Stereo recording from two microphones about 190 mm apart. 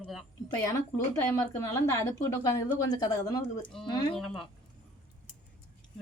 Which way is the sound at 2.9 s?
20° left (ahead or behind).